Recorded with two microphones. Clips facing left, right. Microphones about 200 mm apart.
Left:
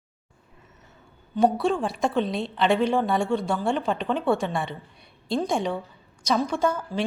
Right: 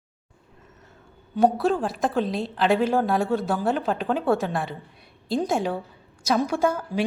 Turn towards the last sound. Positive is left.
turn(degrees=-10)  # may be behind; listen again after turning